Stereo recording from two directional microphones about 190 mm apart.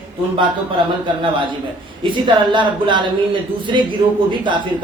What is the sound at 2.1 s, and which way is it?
A woman's voice, 25° right (ahead or behind).